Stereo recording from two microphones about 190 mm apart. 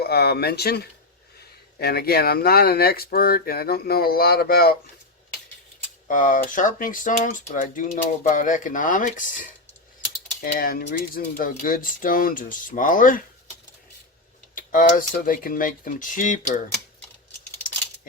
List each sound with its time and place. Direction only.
0.0 s speech: 55° left (ahead or behind)
6.1 s speech: 45° left (ahead or behind)
10.4 s speech: 50° left (ahead or behind)
14.5 s speech: 45° left (ahead or behind)